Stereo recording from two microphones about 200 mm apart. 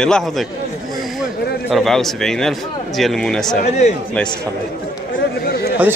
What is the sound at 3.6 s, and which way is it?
Speech, 35° left (ahead or behind).